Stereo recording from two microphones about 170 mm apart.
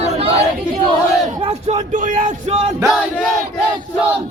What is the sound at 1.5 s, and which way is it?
Speech, 40° right (ahead or behind).